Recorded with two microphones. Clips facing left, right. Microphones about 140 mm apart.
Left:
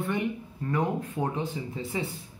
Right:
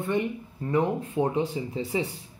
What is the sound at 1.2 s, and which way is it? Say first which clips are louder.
Speech: right 7 dB; 35° right (ahead or behind).